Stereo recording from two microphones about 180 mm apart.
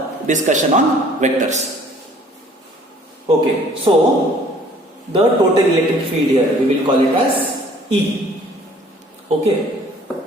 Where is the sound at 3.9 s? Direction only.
30° right (ahead or behind).